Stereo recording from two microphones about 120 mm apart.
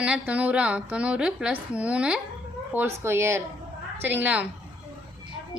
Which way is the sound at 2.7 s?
20° right (ahead or behind).